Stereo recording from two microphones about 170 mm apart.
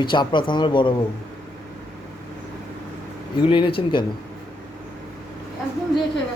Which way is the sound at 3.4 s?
30° left (ahead or behind).